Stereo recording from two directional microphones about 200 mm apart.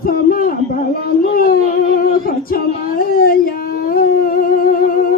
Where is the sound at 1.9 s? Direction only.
45° left (ahead or behind).